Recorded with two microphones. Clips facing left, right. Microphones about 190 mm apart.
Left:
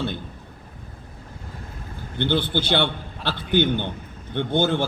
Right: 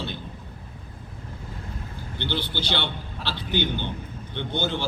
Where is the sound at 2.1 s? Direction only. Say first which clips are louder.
Left 7 dB; 55° left (ahead or behind).